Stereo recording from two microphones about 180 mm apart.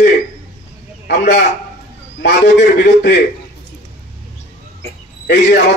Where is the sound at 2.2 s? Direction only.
65° left (ahead or behind).